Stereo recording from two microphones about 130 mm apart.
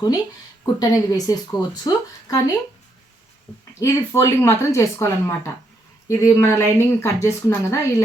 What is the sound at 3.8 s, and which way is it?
A woman's voice, 20° left (ahead or behind).